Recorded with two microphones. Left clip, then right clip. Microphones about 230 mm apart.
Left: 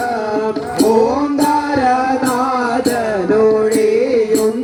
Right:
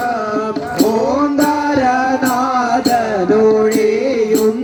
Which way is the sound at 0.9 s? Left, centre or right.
Right.